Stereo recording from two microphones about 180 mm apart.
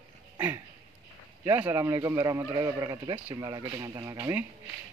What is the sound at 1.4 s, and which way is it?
A man's voice, 15° right (ahead or behind).